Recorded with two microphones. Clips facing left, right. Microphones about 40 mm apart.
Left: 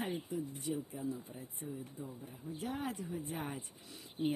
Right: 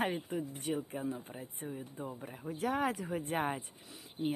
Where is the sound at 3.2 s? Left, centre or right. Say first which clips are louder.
Right 7 dB; right.